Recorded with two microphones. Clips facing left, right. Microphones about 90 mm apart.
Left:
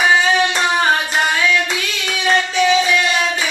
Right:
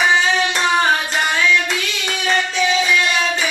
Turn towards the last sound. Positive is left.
turn(degrees=10)  # may be behind; listen again after turning